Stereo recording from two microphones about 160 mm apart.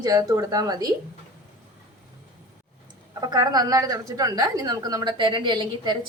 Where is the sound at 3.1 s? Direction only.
25° right (ahead or behind).